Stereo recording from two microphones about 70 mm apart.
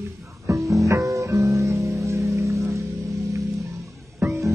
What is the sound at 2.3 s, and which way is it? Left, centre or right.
Music, right.